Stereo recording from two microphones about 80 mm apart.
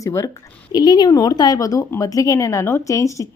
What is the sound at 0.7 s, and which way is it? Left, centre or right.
A woman's voice, left.